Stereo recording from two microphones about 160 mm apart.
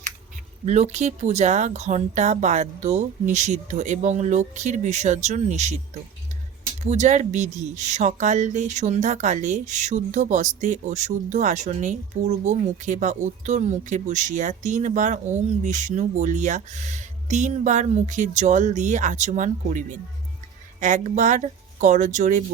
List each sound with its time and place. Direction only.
0.6 s a woman's voice: 45° right (ahead or behind)
6.8 s a woman's voice: 45° right (ahead or behind)
20.8 s a woman's voice: 50° right (ahead or behind)